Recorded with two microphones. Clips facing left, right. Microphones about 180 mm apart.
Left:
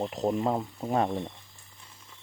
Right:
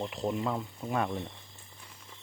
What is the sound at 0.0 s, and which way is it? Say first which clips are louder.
Speech: left 4 dB; 40° left (ahead or behind).